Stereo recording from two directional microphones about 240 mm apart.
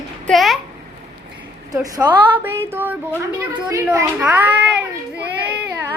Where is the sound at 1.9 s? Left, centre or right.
Centre.